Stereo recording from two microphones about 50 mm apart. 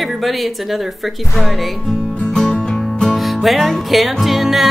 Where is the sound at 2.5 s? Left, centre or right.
Centre.